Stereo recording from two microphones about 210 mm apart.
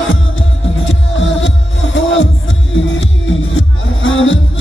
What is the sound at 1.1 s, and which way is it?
Music, 60° left (ahead or behind).